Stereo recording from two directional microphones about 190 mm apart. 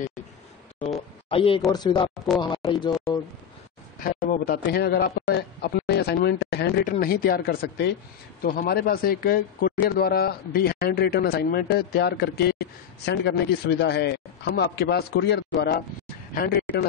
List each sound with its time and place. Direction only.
0.7 s a sound: 35° left (ahead or behind)
1.7 s speech: 20° left (ahead or behind)
4.0 s a man's voice: 45° left (ahead or behind)